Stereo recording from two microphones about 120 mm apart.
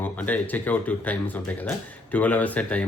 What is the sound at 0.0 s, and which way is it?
Speech, 15° left (ahead or behind).